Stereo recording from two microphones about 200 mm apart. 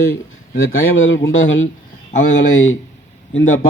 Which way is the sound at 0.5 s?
80° left.